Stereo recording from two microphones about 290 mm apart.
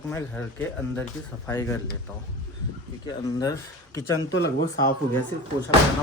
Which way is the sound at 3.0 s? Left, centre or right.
Centre.